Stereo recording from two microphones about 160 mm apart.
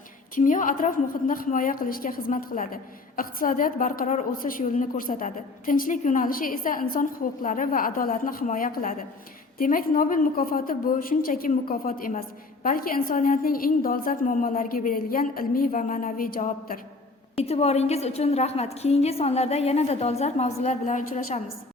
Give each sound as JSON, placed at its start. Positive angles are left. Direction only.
{"t": 0.3, "sound": "a woman's voice", "side_deg": 55}
{"t": 17.3, "sound": "a woman's voice", "side_deg": 40}